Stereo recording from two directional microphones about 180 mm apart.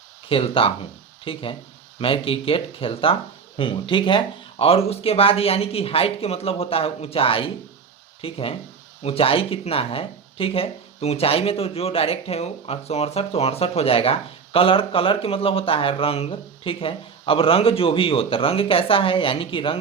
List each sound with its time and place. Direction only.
0.3 s speech: 30° left (ahead or behind)